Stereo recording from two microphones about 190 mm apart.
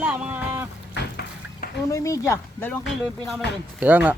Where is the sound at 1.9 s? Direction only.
15° left (ahead or behind).